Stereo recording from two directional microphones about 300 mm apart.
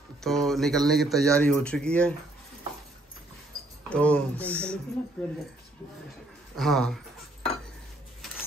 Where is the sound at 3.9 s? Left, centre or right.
Centre.